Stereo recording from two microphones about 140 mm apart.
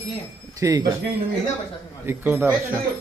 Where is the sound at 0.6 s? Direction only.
25° right (ahead or behind).